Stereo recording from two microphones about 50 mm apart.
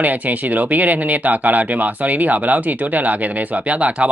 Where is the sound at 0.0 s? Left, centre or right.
Right.